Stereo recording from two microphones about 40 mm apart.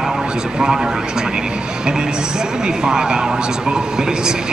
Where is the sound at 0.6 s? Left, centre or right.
Centre.